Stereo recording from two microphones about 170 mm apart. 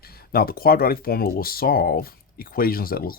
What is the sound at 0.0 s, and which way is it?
Speech, 65° left (ahead or behind).